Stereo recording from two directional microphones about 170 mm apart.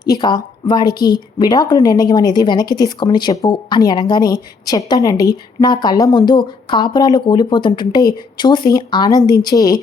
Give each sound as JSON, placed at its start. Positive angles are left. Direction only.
{"t": 0.0, "sound": "a woman's voice", "side_deg": 25}